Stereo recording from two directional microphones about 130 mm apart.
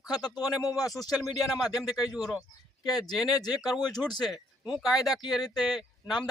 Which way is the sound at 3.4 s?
30° left (ahead or behind).